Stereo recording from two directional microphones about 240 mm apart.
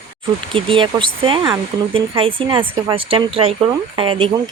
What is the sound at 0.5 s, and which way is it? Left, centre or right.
A woman's voice, right.